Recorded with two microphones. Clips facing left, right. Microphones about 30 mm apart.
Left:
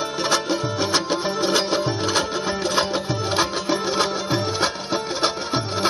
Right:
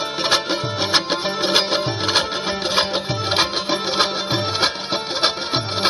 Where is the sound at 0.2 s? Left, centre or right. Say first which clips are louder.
Right 2 dB; right.